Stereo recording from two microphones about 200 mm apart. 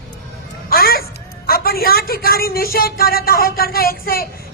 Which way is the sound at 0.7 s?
50° left (ahead or behind).